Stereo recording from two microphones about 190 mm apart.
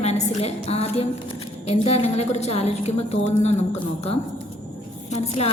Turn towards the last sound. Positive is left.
turn(degrees=35)  # may be behind; listen again after turning